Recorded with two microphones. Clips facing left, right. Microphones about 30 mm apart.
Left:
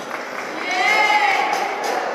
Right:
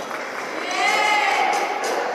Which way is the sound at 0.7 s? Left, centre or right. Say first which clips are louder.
Left 3 dB; centre.